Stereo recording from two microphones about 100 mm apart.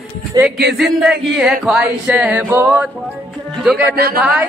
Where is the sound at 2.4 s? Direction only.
20° right (ahead or behind).